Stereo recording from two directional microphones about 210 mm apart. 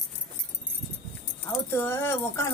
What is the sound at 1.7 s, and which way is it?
Speech, 10° left (ahead or behind).